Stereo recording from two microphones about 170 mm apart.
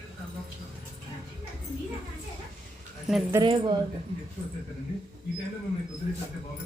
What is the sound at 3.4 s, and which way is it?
Speech, 30° right (ahead or behind).